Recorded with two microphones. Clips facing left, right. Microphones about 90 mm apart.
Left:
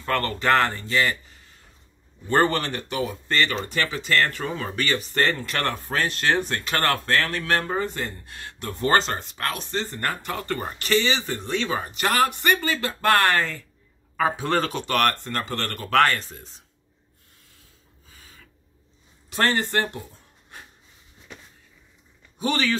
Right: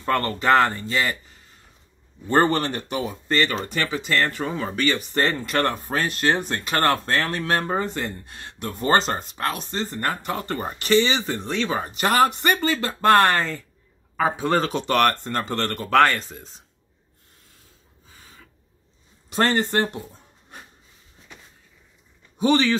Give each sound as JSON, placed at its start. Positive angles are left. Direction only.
{"t": 0.0, "sound": "speech", "side_deg": -25}
{"t": 2.2, "sound": "speech", "side_deg": -30}
{"t": 8.9, "sound": "speech", "side_deg": -35}
{"t": 19.2, "sound": "speech", "side_deg": -25}
{"t": 22.4, "sound": "speech", "side_deg": -25}